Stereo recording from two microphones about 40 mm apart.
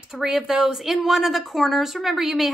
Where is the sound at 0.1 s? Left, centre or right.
Centre.